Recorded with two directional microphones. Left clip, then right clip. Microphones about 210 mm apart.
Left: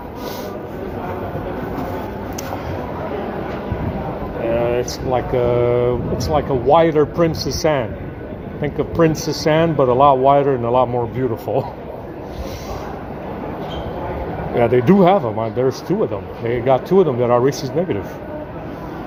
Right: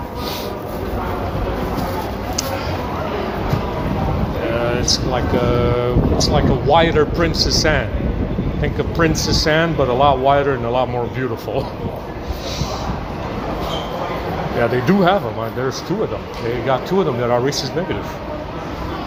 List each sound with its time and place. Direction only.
4.5 s speech: 40° left (ahead or behind)
14.6 s speech: 45° left (ahead or behind)
16.6 s speech: 40° left (ahead or behind)